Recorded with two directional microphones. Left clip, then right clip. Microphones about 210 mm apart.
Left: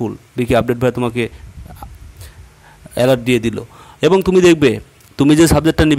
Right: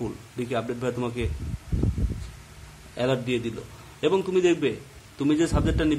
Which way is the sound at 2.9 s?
45° left (ahead or behind).